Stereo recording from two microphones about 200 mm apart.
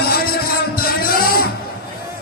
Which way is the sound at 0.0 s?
50° left (ahead or behind).